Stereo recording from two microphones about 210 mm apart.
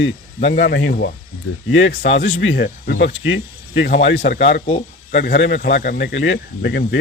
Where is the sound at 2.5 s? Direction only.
50° left (ahead or behind).